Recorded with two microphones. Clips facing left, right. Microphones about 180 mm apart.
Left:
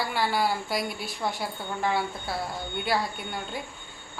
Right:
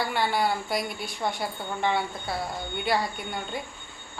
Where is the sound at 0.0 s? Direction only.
Centre (ahead or behind).